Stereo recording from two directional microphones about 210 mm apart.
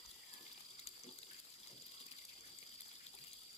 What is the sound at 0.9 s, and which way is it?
Water, 30° left (ahead or behind).